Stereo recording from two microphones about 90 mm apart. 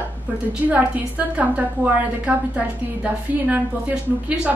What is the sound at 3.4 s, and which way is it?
A woman's voice, 15° right (ahead or behind).